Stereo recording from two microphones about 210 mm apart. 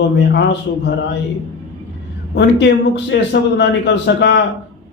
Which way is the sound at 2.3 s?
55° left (ahead or behind).